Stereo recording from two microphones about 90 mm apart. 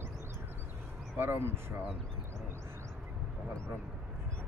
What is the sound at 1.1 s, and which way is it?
Speech, 25° right (ahead or behind).